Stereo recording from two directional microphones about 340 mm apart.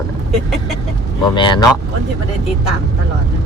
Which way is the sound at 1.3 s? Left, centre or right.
Centre.